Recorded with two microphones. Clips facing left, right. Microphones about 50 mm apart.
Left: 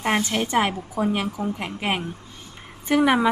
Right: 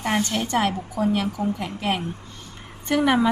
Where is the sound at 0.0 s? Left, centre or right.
Left.